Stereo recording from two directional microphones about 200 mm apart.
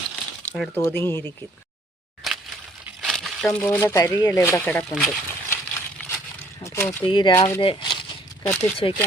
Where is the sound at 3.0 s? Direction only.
Centre (ahead or behind).